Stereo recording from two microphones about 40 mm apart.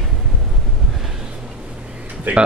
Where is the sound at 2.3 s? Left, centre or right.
Right.